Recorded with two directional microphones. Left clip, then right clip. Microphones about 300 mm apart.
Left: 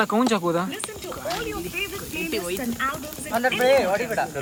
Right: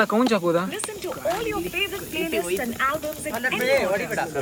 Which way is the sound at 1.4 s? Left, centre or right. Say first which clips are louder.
Right 3 dB; right.